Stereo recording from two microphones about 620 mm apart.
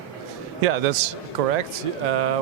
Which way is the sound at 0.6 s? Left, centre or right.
Right.